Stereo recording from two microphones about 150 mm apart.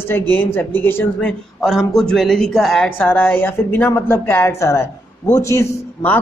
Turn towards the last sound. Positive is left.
turn(degrees=15)  # may be behind; listen again after turning